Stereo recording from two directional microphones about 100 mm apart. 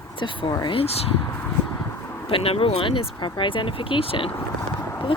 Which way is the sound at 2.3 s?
70° left (ahead or behind).